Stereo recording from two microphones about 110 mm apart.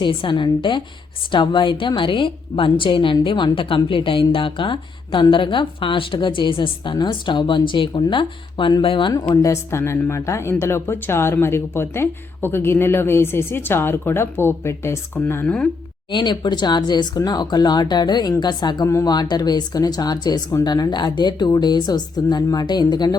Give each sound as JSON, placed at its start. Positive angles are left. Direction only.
{"t": 0.0, "sound": "speech", "side_deg": 50}
{"t": 9.3, "sound": "speech", "side_deg": 30}
{"t": 16.1, "sound": "speech", "side_deg": 45}